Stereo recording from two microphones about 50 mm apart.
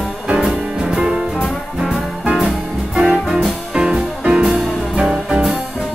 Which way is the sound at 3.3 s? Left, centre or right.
Centre.